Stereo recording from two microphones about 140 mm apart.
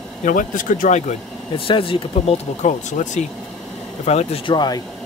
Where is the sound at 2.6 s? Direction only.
60° left (ahead or behind).